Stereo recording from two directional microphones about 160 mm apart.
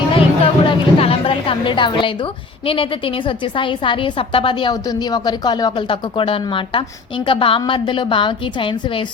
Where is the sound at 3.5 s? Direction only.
30° left (ahead or behind).